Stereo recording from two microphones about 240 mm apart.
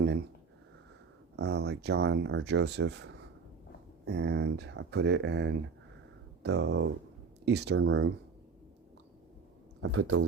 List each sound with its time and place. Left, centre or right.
1.4 s speech: right
9.8 s speech: right